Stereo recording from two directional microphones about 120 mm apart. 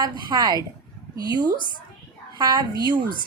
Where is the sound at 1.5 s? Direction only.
40° left (ahead or behind).